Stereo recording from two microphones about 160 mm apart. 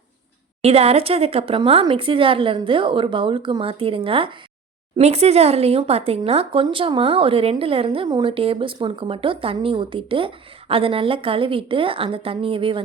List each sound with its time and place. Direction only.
0.6 s speech: 40° right (ahead or behind)